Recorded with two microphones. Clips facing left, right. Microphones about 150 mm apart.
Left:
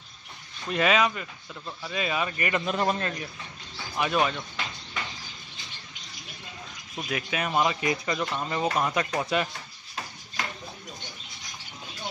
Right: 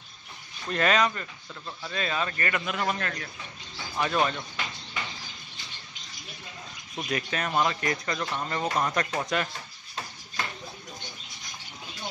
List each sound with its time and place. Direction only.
0.7 s speech: 5° left (ahead or behind)
2.6 s a man's voice: 30° left (ahead or behind)
3.9 s speech: 5° left (ahead or behind)
7.0 s speech: 5° left (ahead or behind)